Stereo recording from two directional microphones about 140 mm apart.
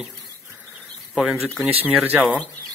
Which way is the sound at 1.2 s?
Centre (ahead or behind).